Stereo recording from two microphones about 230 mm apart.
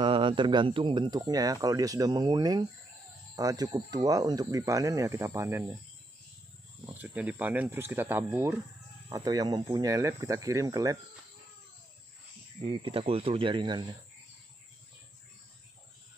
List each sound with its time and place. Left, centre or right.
0.0 s speech: right
6.9 s speech: centre
12.6 s speech: right